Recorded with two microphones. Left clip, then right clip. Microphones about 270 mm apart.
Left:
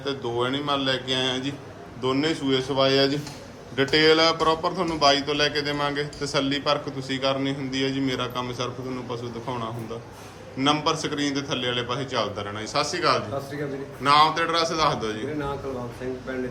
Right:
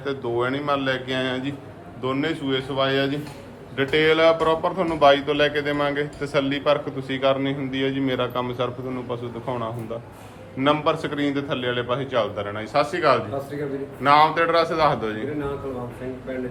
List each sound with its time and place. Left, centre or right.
0.0 s a man's voice: centre